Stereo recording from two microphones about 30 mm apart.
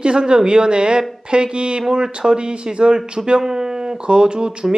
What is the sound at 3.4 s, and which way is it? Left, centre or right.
Speech, centre.